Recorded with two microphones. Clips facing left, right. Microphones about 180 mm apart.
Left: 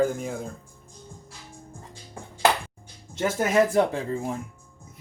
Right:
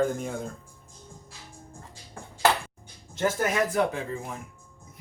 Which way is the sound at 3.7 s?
30° left (ahead or behind).